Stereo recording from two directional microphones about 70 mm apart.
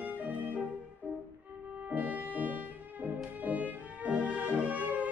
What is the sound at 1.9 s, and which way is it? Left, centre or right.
Music, right.